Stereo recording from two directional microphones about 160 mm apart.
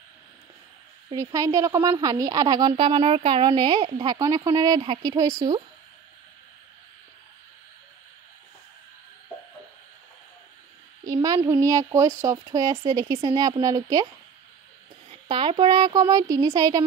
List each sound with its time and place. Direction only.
1.1 s speech: 20° right (ahead or behind)
11.1 s speech: 25° right (ahead or behind)
15.0 s speech: 35° right (ahead or behind)